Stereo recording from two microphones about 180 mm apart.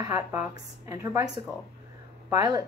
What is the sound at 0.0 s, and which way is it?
A woman's voice, 15° right (ahead or behind).